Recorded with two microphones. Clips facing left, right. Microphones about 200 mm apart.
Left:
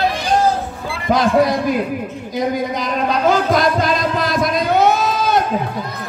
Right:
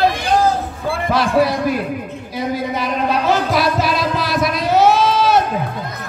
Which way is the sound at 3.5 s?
5° right (ahead or behind).